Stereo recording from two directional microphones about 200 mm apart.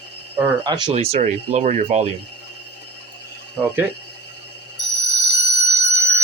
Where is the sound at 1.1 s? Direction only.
35° right (ahead or behind).